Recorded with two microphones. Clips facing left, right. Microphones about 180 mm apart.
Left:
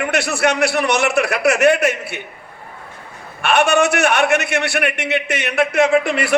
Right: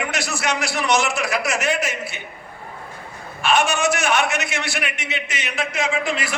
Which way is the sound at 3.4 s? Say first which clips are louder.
Left 4 dB; 65° left (ahead or behind).